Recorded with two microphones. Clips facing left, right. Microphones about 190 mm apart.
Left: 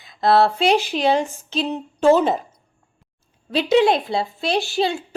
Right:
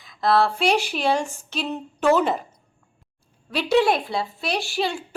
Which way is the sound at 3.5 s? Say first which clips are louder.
Left 3 dB; 25° left (ahead or behind).